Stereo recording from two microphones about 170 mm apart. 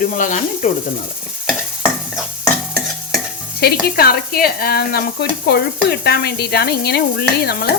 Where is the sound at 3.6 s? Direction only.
65° left (ahead or behind).